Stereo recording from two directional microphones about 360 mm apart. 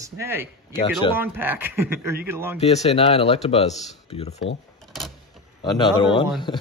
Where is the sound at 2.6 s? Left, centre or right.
Centre.